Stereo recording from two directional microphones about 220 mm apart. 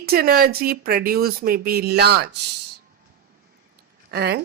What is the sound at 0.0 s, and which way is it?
Speech, 45° right (ahead or behind).